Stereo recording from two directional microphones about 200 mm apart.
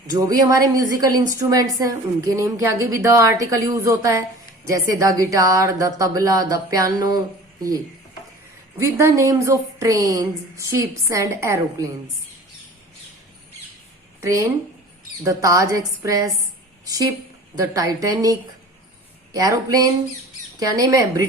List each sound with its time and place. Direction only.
0.1 s a woman's voice: 20° right (ahead or behind)
8.8 s a woman's voice: 15° right (ahead or behind)
14.2 s a woman's voice: 15° right (ahead or behind)
20.6 s a woman's voice: 15° right (ahead or behind)